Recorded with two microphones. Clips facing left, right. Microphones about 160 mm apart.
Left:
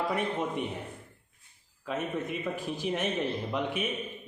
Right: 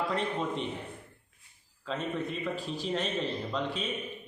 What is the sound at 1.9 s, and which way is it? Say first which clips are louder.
A man's voice: left 1 dB; 15° left (ahead or behind).